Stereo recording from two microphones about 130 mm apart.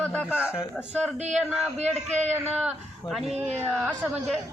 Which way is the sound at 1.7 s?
60° right (ahead or behind).